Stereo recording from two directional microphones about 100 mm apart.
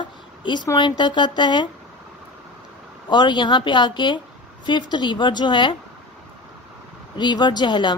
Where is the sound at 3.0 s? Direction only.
50° left (ahead or behind).